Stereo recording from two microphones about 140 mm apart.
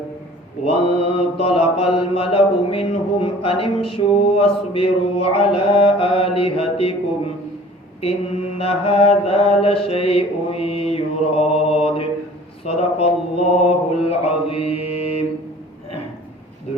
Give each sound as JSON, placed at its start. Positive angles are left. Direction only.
{"t": 0.6, "sound": "mantra", "side_deg": 40}
{"t": 8.5, "sound": "mantra", "side_deg": 45}